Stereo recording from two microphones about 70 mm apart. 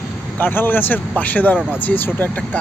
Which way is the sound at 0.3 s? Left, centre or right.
Left.